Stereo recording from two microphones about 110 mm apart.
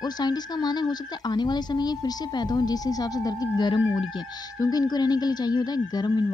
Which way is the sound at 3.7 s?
50° left (ahead or behind).